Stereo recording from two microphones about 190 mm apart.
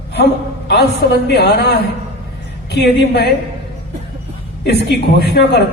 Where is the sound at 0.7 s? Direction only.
60° left (ahead or behind).